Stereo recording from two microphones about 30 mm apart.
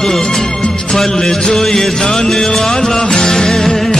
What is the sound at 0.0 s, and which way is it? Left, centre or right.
Music, centre.